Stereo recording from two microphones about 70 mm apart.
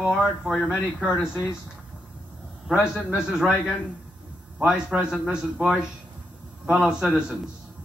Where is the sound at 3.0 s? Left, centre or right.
Centre.